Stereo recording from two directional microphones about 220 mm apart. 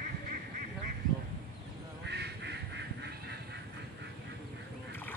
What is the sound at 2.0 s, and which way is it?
Quack, 50° right (ahead or behind).